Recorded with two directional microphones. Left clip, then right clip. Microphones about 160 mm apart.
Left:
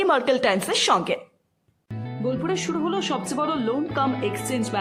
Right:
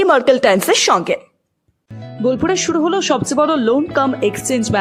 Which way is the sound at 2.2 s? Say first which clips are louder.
Right 10 dB; 45° right (ahead or behind).